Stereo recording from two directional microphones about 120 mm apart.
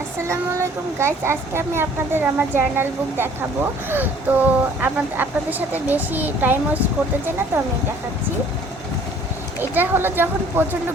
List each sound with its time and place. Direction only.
0.9 s speech: 20° right (ahead or behind)
9.6 s speech: 15° right (ahead or behind)